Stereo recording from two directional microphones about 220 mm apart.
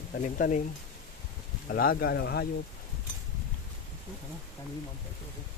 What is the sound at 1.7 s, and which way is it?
Speech, 45° left (ahead or behind).